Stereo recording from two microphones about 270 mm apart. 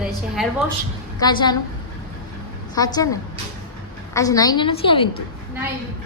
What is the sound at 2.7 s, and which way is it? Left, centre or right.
A woman's voice, centre.